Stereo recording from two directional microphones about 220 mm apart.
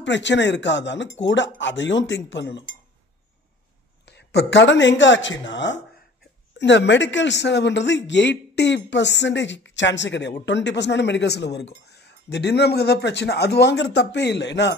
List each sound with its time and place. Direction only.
0.0 s speech: 55° left (ahead or behind)
4.0 s speech: 50° left (ahead or behind)